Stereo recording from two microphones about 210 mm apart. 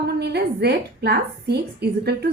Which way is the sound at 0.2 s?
50° right (ahead or behind).